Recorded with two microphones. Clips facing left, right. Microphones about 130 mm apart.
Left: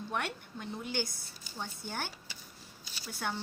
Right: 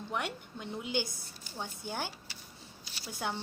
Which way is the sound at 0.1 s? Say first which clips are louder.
Right 1 dB; 15° right (ahead or behind).